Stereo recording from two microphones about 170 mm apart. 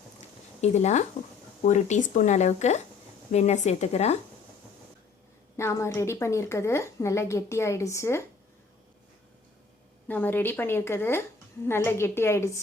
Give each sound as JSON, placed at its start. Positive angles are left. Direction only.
{"t": 0.6, "sound": "a woman's voice", "side_deg": 40}
{"t": 5.5, "sound": "a woman's voice", "side_deg": 15}
{"t": 10.1, "sound": "a woman's voice", "side_deg": 10}